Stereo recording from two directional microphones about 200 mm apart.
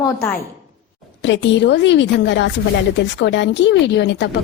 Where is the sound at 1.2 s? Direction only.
60° left (ahead or behind).